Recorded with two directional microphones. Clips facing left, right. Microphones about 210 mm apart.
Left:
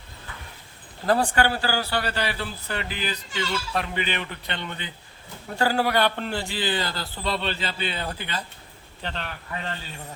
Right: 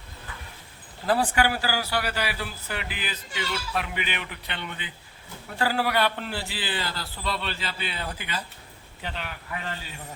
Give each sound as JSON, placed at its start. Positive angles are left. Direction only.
{"t": 1.0, "sound": "a man's voice", "side_deg": -5}
{"t": 7.2, "sound": "a man's voice", "side_deg": 30}
{"t": 7.4, "sound": "a man's voice", "side_deg": 0}